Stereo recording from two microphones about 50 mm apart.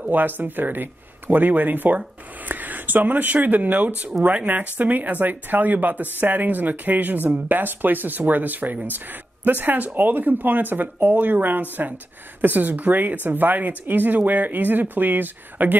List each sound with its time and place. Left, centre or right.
0.1 s speech: right